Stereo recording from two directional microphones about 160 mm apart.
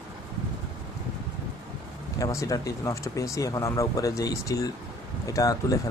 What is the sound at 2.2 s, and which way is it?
Speech, 20° left (ahead or behind).